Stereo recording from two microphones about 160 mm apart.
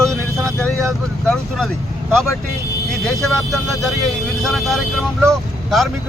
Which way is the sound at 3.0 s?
Centre (ahead or behind).